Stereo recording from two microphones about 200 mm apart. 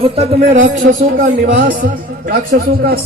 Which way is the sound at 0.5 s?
40° right (ahead or behind).